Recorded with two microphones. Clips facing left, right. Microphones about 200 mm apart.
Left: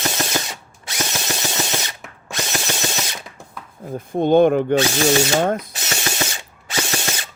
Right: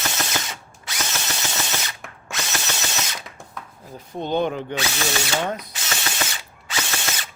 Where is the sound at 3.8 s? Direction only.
50° left (ahead or behind).